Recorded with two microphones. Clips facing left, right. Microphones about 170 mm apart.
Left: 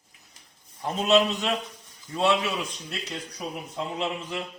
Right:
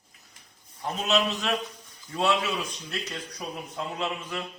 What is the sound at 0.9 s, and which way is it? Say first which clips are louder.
Speech: left 5 dB; 25° left (ahead or behind).